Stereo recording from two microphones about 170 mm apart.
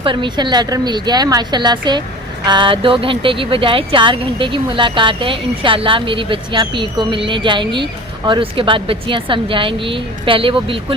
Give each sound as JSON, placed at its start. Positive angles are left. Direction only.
{"t": 0.0, "sound": "speech", "side_deg": -30}